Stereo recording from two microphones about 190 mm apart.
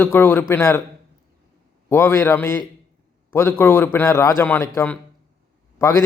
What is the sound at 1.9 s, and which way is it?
A man's voice, 15° left (ahead or behind).